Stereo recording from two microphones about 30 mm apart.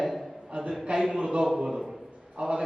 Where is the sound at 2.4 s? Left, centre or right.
Right.